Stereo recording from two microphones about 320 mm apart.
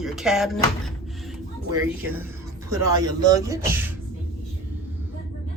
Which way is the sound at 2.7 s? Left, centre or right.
Centre.